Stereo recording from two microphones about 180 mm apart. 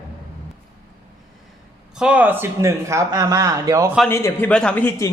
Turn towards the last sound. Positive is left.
turn(degrees=15)  # may be behind; listen again after turning